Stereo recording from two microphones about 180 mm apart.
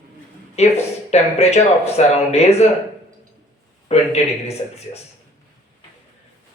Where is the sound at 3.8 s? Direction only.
35° left (ahead or behind).